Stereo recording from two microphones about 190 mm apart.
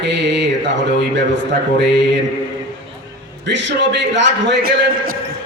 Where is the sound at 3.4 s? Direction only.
70° right (ahead or behind).